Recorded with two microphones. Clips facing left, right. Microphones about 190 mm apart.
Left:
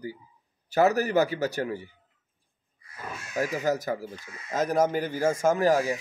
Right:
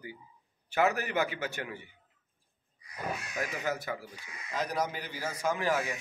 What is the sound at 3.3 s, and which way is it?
Speech, 40° left (ahead or behind).